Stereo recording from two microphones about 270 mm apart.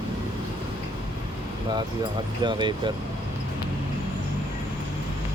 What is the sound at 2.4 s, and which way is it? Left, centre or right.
Speech, centre.